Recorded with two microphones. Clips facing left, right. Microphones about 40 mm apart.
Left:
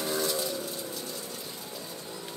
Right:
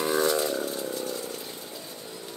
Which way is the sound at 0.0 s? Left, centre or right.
Right.